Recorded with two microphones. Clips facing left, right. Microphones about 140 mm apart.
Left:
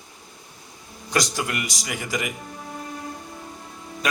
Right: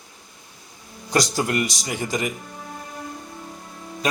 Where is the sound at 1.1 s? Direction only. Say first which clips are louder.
Right 4 dB; 35° right (ahead or behind).